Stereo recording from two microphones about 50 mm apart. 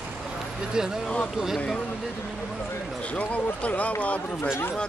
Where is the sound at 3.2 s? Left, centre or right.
Left.